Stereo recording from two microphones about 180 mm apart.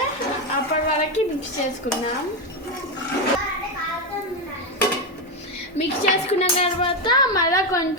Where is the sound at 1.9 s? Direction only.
40° left (ahead or behind).